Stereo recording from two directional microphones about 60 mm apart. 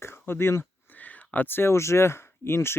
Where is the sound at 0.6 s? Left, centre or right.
Left.